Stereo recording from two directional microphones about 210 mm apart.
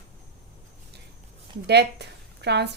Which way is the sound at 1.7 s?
50° right (ahead or behind).